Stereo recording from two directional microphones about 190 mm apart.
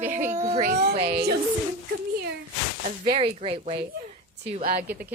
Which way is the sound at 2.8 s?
25° right (ahead or behind).